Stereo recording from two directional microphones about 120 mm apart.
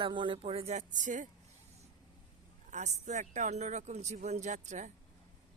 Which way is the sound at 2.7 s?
75° right (ahead or behind).